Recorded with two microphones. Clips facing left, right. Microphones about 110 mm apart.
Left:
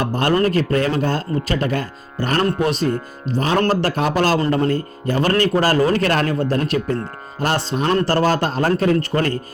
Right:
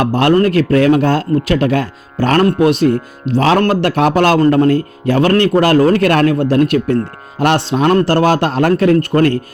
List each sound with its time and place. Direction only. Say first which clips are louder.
0.0 s a man's voice: right 7 dB; 80° right
0.3 s speech: right 4 dB; 65° right (ahead or behind)